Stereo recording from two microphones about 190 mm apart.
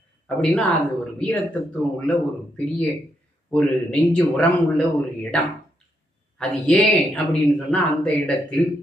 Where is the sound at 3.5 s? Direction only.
5° left (ahead or behind).